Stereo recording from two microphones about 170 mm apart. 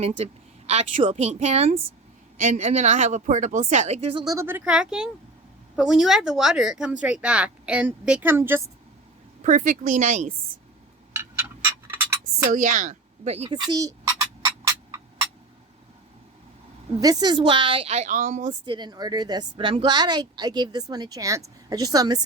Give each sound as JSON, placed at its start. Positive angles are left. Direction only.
{"t": 0.2, "sound": "a woman's voice", "side_deg": -40}
{"t": 4.2, "sound": "speech", "side_deg": -20}
{"t": 9.4, "sound": "a woman's voice", "side_deg": -50}
{"t": 11.2, "sound": "tick-tock", "side_deg": -15}
{"t": 12.4, "sound": "a woman's voice", "side_deg": -50}
{"t": 13.6, "sound": "a sound", "side_deg": -20}
{"t": 17.0, "sound": "speech", "side_deg": -25}
{"t": 18.6, "sound": "a woman's voice", "side_deg": -25}